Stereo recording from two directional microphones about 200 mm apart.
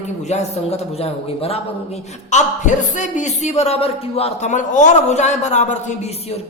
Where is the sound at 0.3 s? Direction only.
30° left (ahead or behind).